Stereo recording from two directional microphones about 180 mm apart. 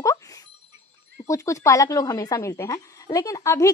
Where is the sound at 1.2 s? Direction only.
15° left (ahead or behind).